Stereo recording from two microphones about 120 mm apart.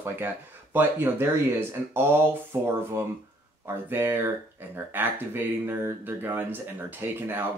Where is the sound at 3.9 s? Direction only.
20° right (ahead or behind).